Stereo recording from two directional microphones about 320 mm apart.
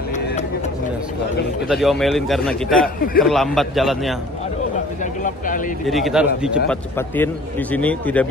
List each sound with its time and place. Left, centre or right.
1.7 s a man's voice: centre
5.0 s speech: left
5.9 s a man's voice: centre